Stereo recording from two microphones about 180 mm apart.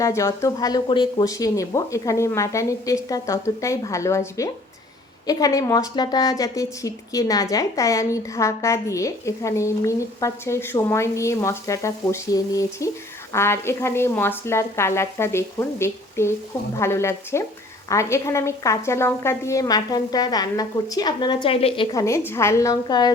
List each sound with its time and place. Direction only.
0.0 s a woman's voice: 15° left (ahead or behind); by 21.8 s 35° left (ahead or behind)
21.9 s a woman's voice: 15° left (ahead or behind)